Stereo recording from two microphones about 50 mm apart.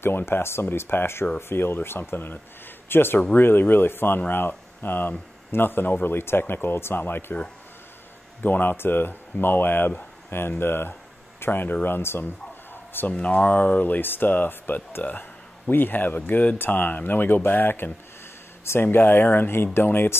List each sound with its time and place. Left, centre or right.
0.0 s speech: left
8.4 s speech: left
13.1 s speech: left